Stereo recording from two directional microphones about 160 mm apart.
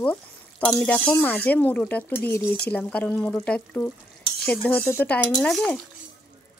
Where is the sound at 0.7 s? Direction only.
10° left (ahead or behind).